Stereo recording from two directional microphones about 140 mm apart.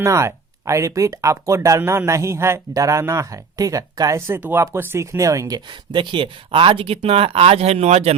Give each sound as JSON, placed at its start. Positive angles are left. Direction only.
{"t": 0.0, "sound": "speech", "side_deg": -20}